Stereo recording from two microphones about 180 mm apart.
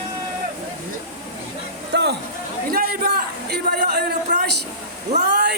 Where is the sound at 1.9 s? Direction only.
70° right (ahead or behind).